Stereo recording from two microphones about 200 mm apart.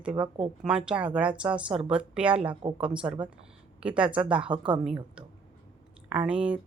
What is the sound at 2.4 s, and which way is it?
Speech, 30° right (ahead or behind).